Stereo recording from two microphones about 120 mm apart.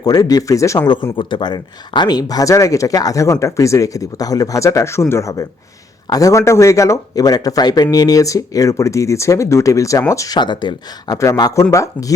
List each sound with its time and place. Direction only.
0.0 s speech: 30° left (ahead or behind)
1.1 s speech: 40° left (ahead or behind)
11.2 s speech: 30° left (ahead or behind)